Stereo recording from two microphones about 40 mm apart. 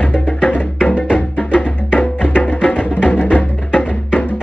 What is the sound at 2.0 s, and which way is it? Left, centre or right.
Music, left.